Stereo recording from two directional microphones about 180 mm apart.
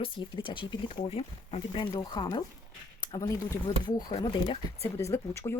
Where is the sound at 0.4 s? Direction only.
25° left (ahead or behind).